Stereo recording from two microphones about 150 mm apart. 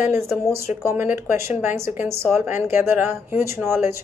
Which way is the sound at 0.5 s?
15° right (ahead or behind).